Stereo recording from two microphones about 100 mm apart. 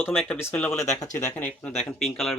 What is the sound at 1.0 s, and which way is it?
Speech, 25° left (ahead or behind).